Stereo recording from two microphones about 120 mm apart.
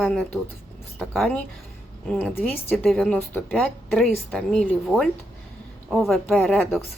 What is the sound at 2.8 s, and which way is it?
Speech, centre (ahead or behind).